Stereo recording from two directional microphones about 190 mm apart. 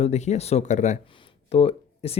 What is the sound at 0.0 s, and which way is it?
Speech, 35° left (ahead or behind).